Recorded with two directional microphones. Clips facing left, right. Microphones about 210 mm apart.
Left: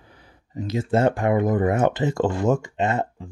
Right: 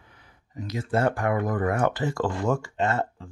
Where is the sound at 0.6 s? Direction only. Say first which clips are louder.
Left 5 dB; 25° left (ahead or behind).